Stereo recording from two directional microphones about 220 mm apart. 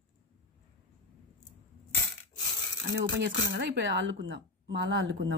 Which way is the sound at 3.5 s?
55° right (ahead or behind).